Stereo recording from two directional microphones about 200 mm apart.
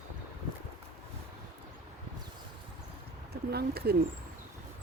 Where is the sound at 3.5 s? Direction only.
50° right (ahead or behind).